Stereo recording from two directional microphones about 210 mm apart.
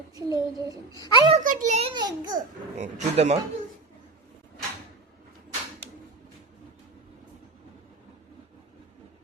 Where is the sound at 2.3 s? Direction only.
35° right (ahead or behind).